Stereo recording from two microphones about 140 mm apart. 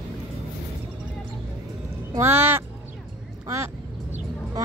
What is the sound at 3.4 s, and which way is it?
Quack, 20° right (ahead or behind).